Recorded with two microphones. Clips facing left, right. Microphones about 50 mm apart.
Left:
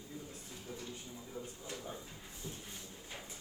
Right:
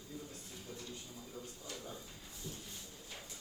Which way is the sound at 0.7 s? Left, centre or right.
Left.